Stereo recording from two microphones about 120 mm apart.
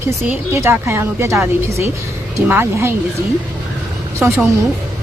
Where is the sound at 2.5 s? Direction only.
20° right (ahead or behind).